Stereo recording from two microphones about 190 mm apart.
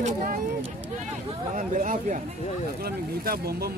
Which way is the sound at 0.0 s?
50° right (ahead or behind).